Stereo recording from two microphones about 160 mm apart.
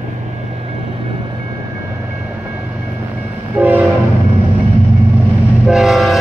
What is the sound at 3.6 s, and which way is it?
Train horn, 10° right (ahead or behind).